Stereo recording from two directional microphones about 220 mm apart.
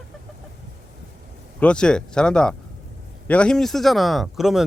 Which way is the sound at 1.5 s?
5° left (ahead or behind).